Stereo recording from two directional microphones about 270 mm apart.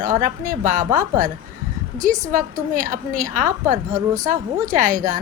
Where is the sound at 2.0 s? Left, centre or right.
Right.